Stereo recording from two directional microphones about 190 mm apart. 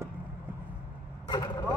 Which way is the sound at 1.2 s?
20° left (ahead or behind).